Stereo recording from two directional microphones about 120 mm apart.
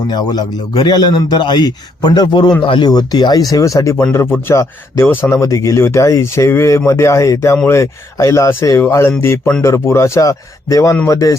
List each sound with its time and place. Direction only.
0.1 s a man's voice: 35° left (ahead or behind)